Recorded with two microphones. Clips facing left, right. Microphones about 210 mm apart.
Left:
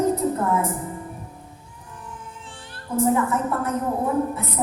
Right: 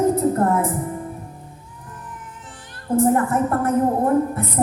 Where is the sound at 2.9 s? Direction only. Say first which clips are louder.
Right 3 dB; 55° right (ahead or behind).